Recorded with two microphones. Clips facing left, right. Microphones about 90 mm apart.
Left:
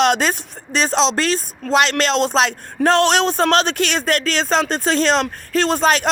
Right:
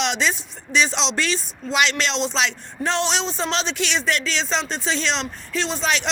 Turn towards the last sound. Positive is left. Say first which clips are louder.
# left 7 dB
turn(degrees=45)  # may be behind; listen again after turning